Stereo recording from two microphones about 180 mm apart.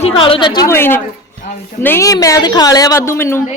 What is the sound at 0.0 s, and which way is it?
A woman's voice, 30° left (ahead or behind).